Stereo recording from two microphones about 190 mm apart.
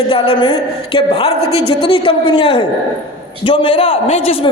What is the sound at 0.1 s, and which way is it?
A man's voice, 30° left (ahead or behind).